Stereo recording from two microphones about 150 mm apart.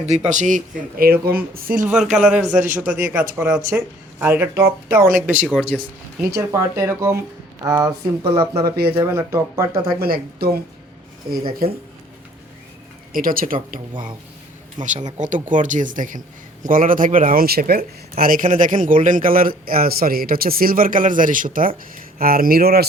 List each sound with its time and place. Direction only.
0.0 s a man's voice: 45° right (ahead or behind); by 1.8 s 75° right (ahead or behind)
1.8 s speech: 5° right (ahead or behind)
6.3 s speech: 20° right (ahead or behind)
10.0 s a woman's voice: 90° right
11.3 s a man's voice: 75° right (ahead or behind)
13.1 s a man's voice: 70° right (ahead or behind)
21.9 s speech: 80° right